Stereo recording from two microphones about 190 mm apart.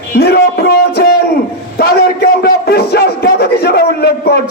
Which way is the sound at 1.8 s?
55° left (ahead or behind).